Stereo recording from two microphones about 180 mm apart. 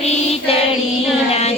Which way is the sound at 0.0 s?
35° left (ahead or behind).